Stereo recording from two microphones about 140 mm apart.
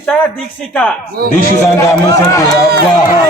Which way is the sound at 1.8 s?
25° left (ahead or behind).